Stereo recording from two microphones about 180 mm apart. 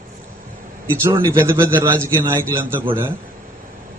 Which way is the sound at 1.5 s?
15° right (ahead or behind).